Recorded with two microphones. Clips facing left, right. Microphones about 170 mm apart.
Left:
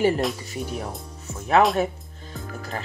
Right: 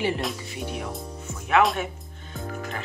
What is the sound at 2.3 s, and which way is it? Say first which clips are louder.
Music: even; 35° left (ahead or behind).